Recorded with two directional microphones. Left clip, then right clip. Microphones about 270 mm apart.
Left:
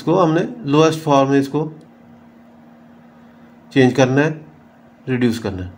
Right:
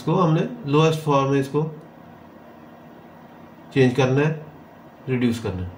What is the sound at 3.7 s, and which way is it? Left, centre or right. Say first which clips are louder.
Speech: left 5 dB; left.